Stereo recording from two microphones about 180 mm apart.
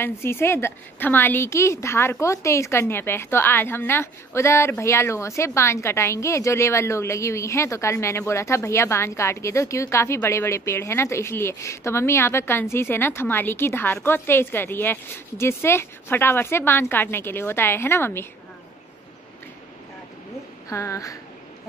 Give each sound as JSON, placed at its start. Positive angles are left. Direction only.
{"t": 0.0, "sound": "a woman's voice", "side_deg": 15}
{"t": 20.7, "sound": "a woman's voice", "side_deg": 15}